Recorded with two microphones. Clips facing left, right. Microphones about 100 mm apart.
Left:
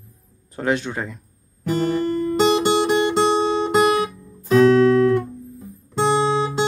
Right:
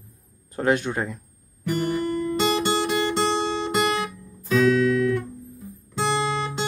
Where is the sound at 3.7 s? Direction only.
50° left (ahead or behind).